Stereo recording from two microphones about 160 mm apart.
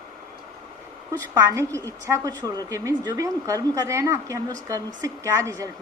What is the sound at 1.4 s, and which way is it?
A woman's voice, 20° right (ahead or behind).